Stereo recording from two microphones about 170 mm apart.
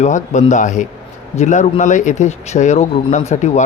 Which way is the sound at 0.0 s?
45° left (ahead or behind).